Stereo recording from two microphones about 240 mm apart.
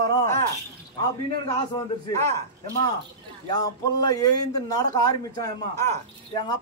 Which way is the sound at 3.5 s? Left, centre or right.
Centre.